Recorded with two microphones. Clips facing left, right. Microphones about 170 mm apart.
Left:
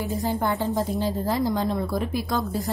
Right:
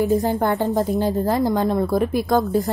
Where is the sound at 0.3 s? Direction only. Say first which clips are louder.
Right 5 dB; 50° right (ahead or behind).